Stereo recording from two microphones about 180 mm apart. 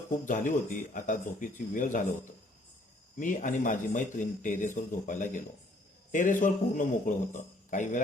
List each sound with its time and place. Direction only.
0.3 s a man's voice: 45° left (ahead or behind)
3.2 s a man's voice: 45° left (ahead or behind)